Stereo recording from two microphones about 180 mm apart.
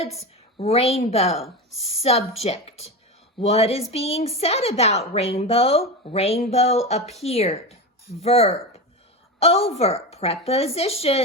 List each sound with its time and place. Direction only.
0.5 s speech: 35° left (ahead or behind)